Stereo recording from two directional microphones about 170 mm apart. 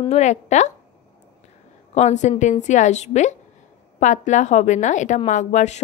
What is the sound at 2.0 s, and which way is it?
A woman's voice, 40° left (ahead or behind).